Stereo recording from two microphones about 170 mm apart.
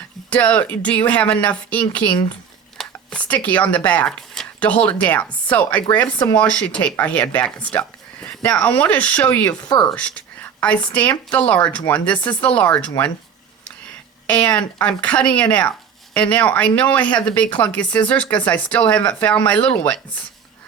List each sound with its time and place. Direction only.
0.3 s speech: 10° left (ahead or behind)
14.3 s speech: 5° left (ahead or behind)